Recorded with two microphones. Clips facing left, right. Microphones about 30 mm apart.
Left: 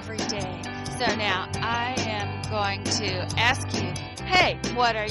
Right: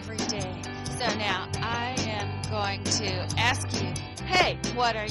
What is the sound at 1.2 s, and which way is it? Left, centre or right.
Music, centre.